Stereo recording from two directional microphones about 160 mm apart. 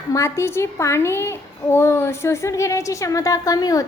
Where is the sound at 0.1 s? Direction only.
15° left (ahead or behind).